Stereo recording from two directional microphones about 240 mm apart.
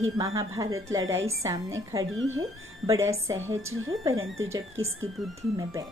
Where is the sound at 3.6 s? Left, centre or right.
Right.